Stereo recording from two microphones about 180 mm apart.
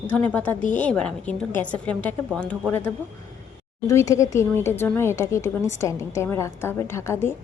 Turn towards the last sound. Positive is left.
turn(degrees=15)  # may be behind; listen again after turning